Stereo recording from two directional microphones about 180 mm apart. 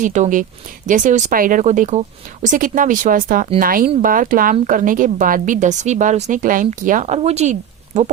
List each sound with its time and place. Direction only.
0.0 s speech: 45° right (ahead or behind)